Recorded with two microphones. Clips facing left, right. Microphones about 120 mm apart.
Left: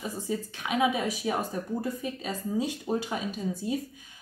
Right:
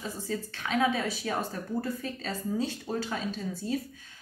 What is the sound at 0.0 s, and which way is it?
A woman's voice, 15° left (ahead or behind).